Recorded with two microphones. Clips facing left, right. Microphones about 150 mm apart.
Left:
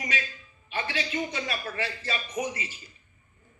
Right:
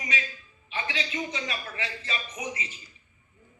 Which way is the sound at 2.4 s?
60° left (ahead or behind).